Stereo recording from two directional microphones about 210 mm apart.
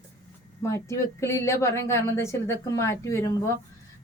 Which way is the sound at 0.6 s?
15° left (ahead or behind).